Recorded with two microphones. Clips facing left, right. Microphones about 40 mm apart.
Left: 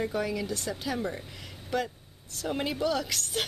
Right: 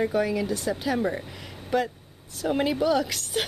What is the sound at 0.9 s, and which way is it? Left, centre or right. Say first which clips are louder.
Speech: right 6 dB; right.